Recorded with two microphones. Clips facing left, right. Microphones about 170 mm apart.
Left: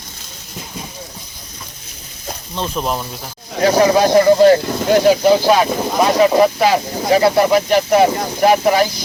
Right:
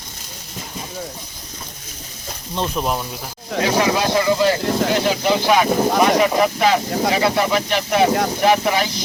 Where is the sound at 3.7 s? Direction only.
40° left (ahead or behind).